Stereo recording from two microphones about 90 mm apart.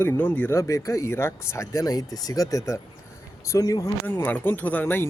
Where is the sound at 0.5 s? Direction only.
35° left (ahead or behind).